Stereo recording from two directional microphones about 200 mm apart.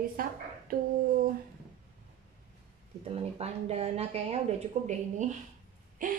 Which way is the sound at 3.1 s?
30° right (ahead or behind).